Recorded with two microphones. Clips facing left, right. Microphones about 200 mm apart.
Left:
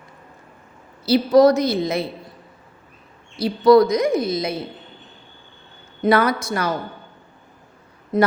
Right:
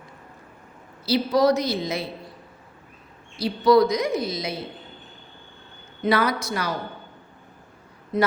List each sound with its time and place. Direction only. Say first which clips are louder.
1.0 s a woman's voice: left 6 dB; 50° left (ahead or behind)
3.4 s a woman's voice: left 4 dB; 55° left (ahead or behind)
6.0 s a woman's voice: left 4 dB; 50° left (ahead or behind)
8.1 s a woman's voice: left 4 dB; 45° left (ahead or behind)